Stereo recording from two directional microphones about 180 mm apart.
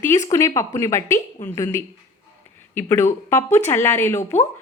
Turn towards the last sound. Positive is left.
turn(degrees=15)  # may be behind; listen again after turning